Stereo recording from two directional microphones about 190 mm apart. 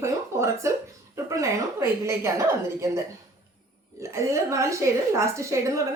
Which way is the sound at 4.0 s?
15° right (ahead or behind).